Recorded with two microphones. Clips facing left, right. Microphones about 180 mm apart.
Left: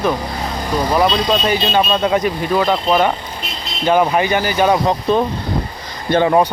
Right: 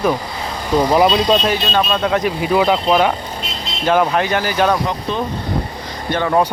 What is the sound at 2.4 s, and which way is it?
Speech, 10° right (ahead or behind).